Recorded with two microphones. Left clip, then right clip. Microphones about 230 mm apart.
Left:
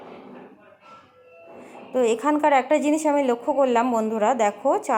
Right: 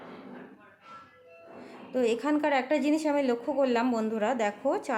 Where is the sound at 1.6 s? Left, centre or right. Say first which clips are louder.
Left 6 dB; centre.